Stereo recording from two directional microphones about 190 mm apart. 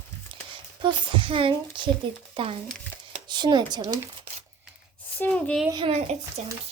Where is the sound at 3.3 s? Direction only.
25° right (ahead or behind).